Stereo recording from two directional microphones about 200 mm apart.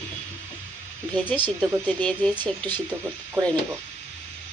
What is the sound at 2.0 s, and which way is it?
Speech, 5° left (ahead or behind).